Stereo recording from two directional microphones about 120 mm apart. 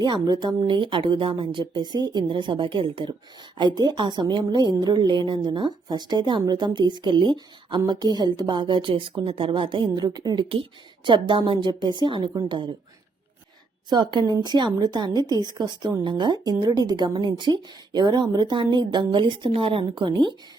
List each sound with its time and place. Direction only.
0.0 s a woman's voice: 40° right (ahead or behind)
13.9 s speech: 35° right (ahead or behind)